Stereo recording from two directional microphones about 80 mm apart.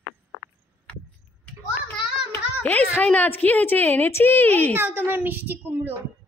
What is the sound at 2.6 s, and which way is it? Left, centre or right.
A woman's voice, centre.